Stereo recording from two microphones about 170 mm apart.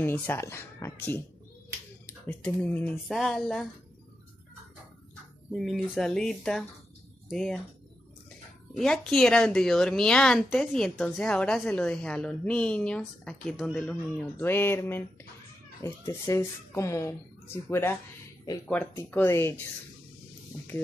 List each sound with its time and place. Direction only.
0.0 s speech: 15° left (ahead or behind)
5.5 s a woman's voice: centre (ahead or behind)
8.7 s a woman's voice: 5° left (ahead or behind)